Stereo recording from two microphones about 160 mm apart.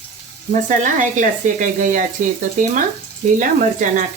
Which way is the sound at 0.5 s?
55° right (ahead or behind).